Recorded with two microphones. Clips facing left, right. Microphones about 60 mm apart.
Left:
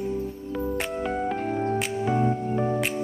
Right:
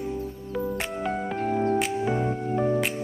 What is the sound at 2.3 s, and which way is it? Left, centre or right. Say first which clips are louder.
Music: left 2 dB; right.